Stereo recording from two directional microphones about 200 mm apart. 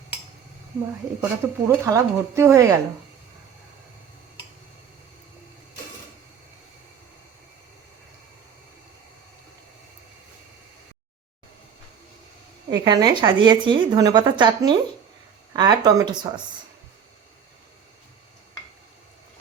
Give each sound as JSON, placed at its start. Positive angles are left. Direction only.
{"t": 1.2, "sound": "speech", "side_deg": -10}
{"t": 12.7, "sound": "a woman's voice", "side_deg": -20}